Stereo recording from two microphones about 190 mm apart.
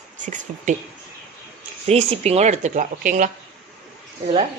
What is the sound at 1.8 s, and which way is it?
Speech, 35° right (ahead or behind).